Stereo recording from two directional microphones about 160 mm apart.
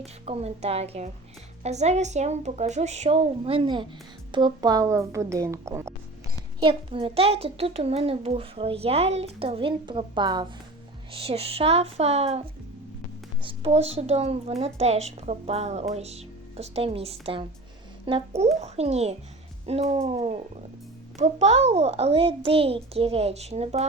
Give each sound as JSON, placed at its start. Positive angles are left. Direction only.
{"t": 0.0, "sound": "a woman's voice", "side_deg": -40}
{"t": 6.6, "sound": "speech", "side_deg": -35}
{"t": 13.4, "sound": "speech", "side_deg": -35}